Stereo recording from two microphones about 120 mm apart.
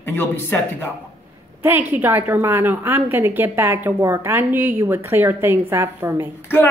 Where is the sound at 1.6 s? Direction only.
15° right (ahead or behind).